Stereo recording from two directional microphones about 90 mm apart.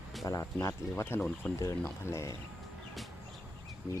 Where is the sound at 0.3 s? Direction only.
35° left (ahead or behind).